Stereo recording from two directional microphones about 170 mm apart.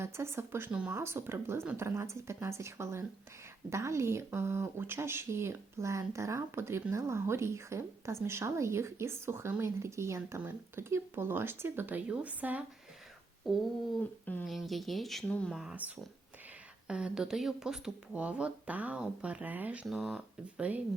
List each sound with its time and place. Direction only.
0.0 s speech: 15° right (ahead or behind)
14.3 s speech: 10° left (ahead or behind)
16.9 s speech: 5° right (ahead or behind)